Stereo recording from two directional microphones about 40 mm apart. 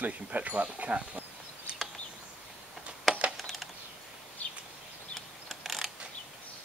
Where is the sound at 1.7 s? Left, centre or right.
Right.